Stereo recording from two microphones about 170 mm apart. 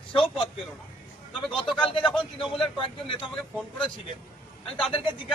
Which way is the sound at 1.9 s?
30° left (ahead or behind).